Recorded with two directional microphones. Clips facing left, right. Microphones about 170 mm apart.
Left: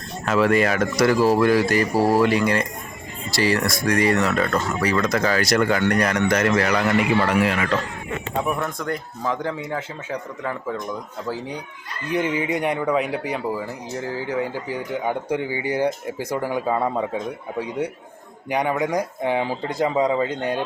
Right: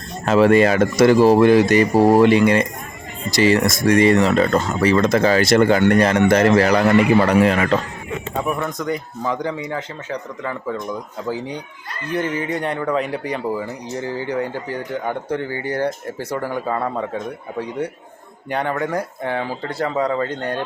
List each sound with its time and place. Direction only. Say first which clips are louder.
0.3 s speech: right 5 dB; 30° right (ahead or behind)
8.4 s speech: right 2 dB; centre (ahead or behind)